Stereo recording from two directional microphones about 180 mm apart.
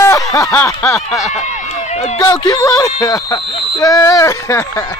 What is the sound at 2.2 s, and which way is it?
Speech, 20° left (ahead or behind).